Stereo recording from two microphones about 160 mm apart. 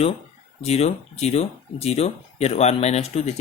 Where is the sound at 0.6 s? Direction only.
40° left (ahead or behind).